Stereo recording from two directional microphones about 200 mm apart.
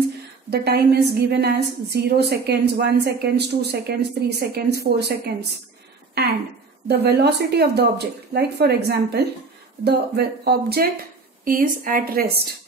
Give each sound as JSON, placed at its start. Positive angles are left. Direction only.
{"t": 0.5, "sound": "a woman's voice", "side_deg": -55}